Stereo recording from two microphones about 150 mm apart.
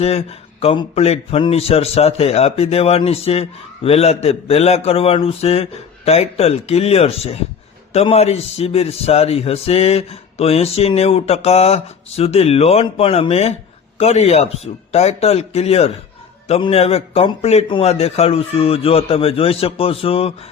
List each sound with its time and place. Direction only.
0.0 s a man's voice: 40° left (ahead or behind)